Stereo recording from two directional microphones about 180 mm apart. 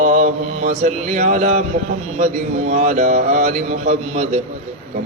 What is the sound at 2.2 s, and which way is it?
Speech, 40° right (ahead or behind).